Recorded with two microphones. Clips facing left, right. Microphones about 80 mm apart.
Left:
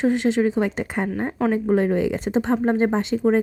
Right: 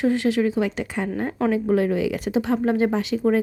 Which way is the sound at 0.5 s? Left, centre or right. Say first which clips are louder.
Left 1 dB; left.